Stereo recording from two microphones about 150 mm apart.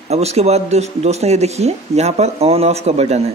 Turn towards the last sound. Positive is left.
turn(degrees=-45)  # may be behind; listen again after turning